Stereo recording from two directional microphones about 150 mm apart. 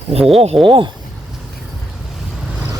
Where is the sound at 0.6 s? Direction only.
35° right (ahead or behind).